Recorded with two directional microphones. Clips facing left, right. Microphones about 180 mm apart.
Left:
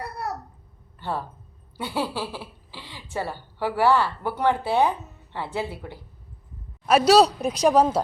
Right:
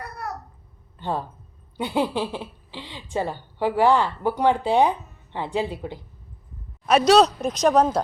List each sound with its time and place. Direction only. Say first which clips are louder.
0.9 s speech: right 2 dB; 15° right (ahead or behind)
6.8 s speech: even; 5° left (ahead or behind)